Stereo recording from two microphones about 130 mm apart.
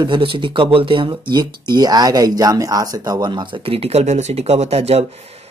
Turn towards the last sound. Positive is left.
turn(degrees=-55)  # may be behind; listen again after turning